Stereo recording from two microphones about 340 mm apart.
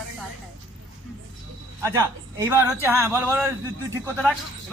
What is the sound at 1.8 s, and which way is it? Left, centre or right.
A man's voice, centre.